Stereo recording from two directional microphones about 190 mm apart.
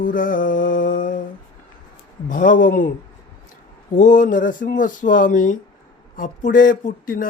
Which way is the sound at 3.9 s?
40° left (ahead or behind).